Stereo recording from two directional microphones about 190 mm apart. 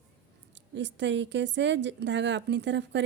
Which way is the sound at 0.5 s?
70° right (ahead or behind).